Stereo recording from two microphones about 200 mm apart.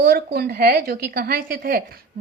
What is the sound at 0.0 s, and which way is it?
A woman's voice, 45° right (ahead or behind).